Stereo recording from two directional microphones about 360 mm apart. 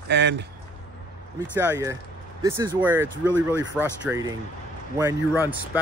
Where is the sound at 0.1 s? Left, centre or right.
Right.